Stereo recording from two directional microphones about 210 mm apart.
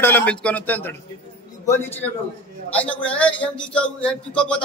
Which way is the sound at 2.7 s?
5° left (ahead or behind).